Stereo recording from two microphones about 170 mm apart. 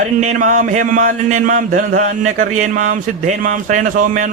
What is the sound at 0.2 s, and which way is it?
A man's voice, 45° right (ahead or behind).